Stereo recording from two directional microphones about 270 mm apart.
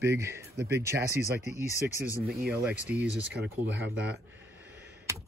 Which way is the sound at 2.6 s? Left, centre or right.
Centre.